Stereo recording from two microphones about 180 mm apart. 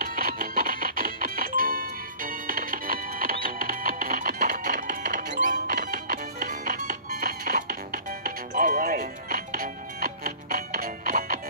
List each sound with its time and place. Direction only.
0.0 s music: 50° right (ahead or behind)